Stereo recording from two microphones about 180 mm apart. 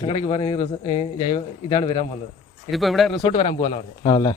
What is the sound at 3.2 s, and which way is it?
Speech, 30° left (ahead or behind).